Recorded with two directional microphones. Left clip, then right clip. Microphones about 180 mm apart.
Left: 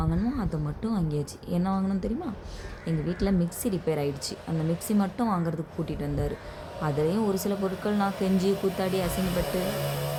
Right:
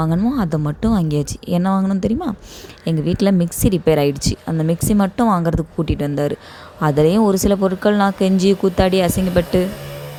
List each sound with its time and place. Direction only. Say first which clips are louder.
0.0 s speech: right 11 dB; 50° right (ahead or behind)